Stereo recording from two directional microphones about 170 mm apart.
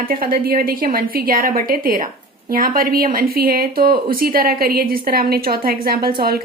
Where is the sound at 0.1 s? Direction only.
55° right (ahead or behind).